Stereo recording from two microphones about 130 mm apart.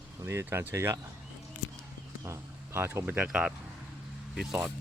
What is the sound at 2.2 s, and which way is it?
Speech, 20° right (ahead or behind).